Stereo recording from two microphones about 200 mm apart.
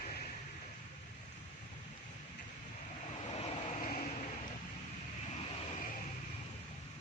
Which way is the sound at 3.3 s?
35° left (ahead or behind).